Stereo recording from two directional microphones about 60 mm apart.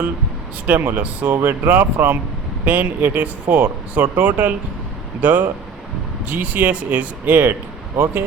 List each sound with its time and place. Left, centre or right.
0.7 s speech: right
7.9 s speech: right